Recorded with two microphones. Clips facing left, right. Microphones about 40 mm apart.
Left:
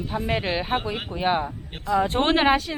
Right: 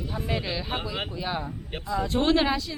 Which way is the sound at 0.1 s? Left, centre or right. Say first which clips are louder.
Left 5 dB; left.